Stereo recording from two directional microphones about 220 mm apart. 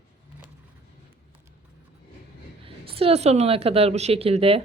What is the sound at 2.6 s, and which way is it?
Speech, 25° right (ahead or behind).